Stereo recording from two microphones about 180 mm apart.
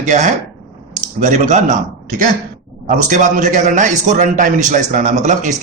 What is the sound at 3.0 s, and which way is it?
Speech, 45° right (ahead or behind).